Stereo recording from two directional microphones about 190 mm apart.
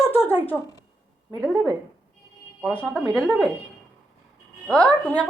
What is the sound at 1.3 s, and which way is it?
Speech, centre (ahead or behind).